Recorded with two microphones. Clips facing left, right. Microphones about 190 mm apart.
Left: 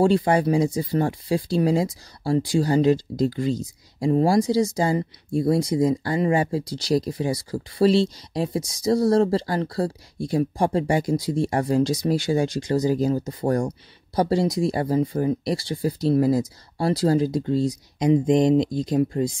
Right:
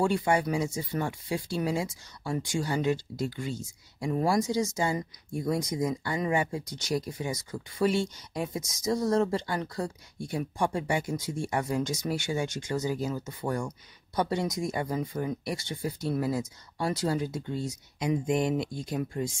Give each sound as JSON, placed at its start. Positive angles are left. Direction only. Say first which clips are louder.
{"t": 0.0, "sound": "speech", "louder": "left 7 dB", "side_deg": 35}